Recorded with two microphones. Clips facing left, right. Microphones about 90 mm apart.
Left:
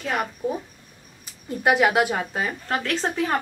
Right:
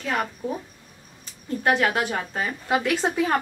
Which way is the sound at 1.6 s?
10° left (ahead or behind).